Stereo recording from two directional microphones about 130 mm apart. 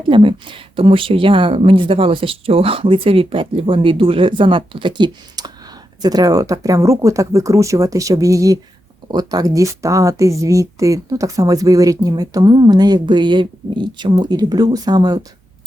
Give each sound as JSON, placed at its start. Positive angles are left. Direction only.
{"t": 0.1, "sound": "speech", "side_deg": -40}